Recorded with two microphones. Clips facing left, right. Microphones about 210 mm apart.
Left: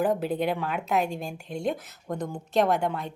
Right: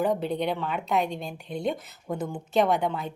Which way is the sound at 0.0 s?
5° left (ahead or behind).